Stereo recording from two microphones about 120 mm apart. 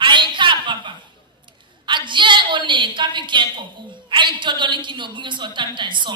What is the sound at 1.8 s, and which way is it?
A woman's voice, 40° right (ahead or behind).